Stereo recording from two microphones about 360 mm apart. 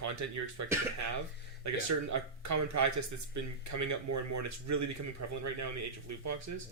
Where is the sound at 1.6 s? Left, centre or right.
Right.